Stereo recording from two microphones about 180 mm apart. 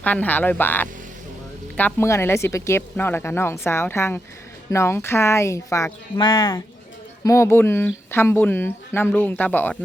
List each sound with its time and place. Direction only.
0.0 s speech: 10° left (ahead or behind)